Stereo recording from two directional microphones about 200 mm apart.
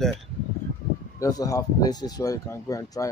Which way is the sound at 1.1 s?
15° left (ahead or behind).